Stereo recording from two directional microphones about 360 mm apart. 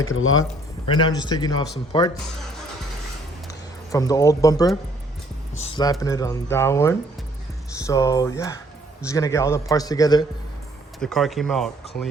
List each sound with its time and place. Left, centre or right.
0.1 s speech: left
0.9 s speech: centre
3.9 s speech: centre